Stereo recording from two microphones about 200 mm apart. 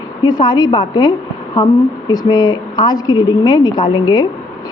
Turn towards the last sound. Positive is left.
turn(degrees=20)  # may be behind; listen again after turning